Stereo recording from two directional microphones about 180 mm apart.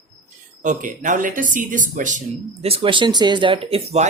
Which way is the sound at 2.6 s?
30° right (ahead or behind).